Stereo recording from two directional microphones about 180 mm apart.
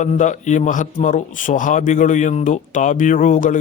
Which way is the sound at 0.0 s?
40° left (ahead or behind).